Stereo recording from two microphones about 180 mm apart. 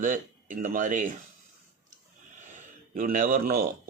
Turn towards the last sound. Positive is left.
turn(degrees=-50)  # may be behind; listen again after turning